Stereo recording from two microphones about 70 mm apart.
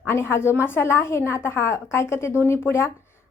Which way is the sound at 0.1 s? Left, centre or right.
Left.